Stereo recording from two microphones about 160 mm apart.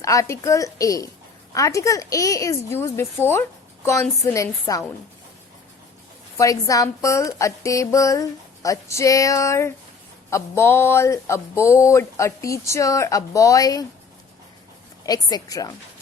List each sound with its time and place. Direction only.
0.0 s a woman's voice: 20° left (ahead or behind)
6.3 s a woman's voice: 20° left (ahead or behind)
15.0 s a woman's voice: 25° left (ahead or behind)